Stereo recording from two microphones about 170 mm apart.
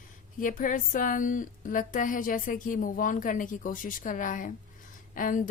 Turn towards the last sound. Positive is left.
turn(degrees=50)  # may be behind; listen again after turning